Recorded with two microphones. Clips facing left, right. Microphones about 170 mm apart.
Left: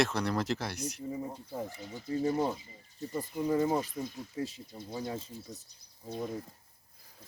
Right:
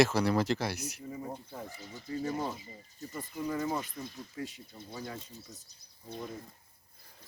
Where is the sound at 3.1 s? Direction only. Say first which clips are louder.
Left 5 dB; 30° left (ahead or behind).